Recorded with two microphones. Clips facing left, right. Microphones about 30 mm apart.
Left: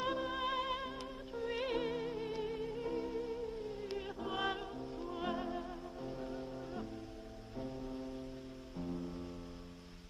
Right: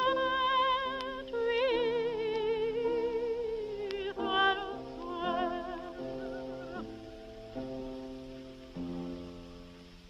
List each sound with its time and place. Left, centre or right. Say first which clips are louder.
0.0 s music: right 8 dB; right
0.9 s music: right 9 dB; right
4.5 s music: right 8 dB; right